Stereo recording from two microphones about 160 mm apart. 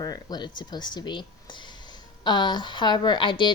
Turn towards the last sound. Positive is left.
turn(degrees=30)  # may be behind; listen again after turning